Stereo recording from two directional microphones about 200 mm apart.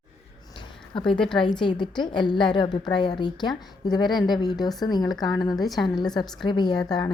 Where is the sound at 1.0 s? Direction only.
5° left (ahead or behind).